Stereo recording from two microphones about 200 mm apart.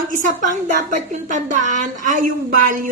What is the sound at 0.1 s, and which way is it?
A woman's voice, 40° right (ahead or behind).